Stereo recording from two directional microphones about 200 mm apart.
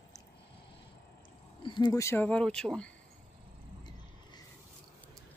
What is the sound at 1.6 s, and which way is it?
Speech, 25° left (ahead or behind).